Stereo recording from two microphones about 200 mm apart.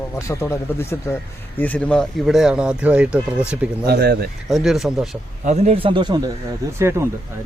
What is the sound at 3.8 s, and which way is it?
Speech, 50° right (ahead or behind).